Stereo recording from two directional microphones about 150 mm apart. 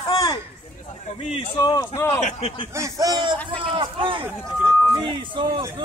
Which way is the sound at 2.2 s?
45° left (ahead or behind).